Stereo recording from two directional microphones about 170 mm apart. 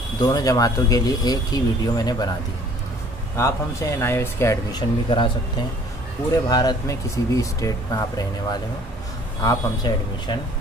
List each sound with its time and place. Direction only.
0.2 s speech: 20° left (ahead or behind)
3.3 s speech: 15° left (ahead or behind)
6.3 s speech: 25° left (ahead or behind)
9.4 s speech: 25° left (ahead or behind)